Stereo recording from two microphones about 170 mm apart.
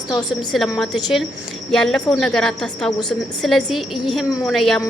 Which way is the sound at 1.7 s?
5° left (ahead or behind).